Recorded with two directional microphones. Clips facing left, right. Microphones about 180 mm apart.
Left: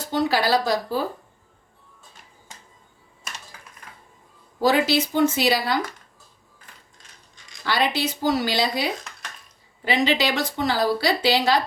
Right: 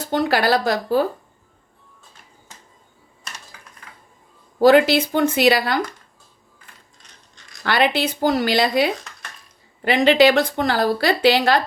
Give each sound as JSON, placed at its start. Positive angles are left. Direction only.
{"t": 0.1, "sound": "a woman's voice", "side_deg": -60}
{"t": 4.6, "sound": "a woman's voice", "side_deg": -60}
{"t": 7.6, "sound": "a woman's voice", "side_deg": -60}